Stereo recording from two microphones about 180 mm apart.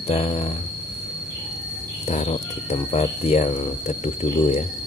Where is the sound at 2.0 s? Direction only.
35° left (ahead or behind).